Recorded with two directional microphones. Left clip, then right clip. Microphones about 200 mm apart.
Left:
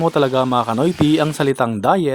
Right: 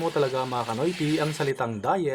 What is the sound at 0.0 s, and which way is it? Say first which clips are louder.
Speech: left 9 dB; 45° left (ahead or behind).